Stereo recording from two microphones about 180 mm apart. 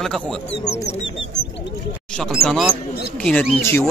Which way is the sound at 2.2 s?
Centre (ahead or behind).